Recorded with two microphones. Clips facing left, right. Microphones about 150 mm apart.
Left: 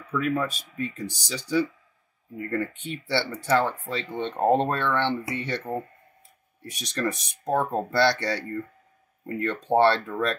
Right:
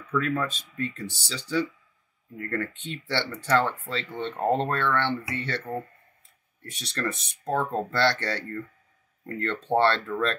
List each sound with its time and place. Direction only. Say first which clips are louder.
0.0 s speech: left 1 dB; 10° left (ahead or behind)